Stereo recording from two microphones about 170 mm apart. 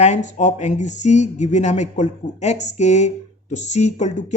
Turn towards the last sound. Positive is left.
turn(degrees=45)  # may be behind; listen again after turning